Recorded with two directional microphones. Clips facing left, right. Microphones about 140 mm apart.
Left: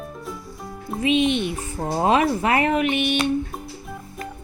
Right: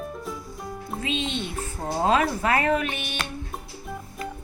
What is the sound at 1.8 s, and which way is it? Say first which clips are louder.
Speech: left 3 dB; 15° left (ahead or behind).